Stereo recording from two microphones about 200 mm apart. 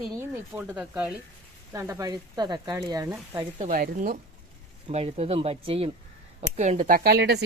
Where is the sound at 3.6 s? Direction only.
45° right (ahead or behind).